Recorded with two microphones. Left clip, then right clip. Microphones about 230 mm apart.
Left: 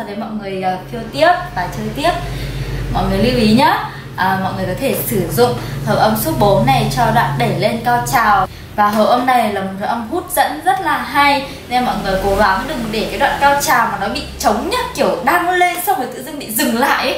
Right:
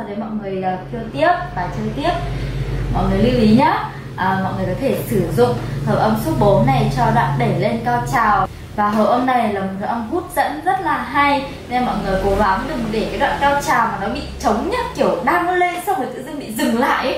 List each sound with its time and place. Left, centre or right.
0.6 s a woman's voice: centre
6.3 s a woman's voice: right
6.6 s a woman's voice: centre